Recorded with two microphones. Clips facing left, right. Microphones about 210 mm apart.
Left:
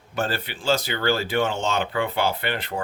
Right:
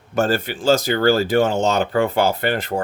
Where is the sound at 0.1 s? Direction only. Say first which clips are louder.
Right 8 dB; 45° right (ahead or behind).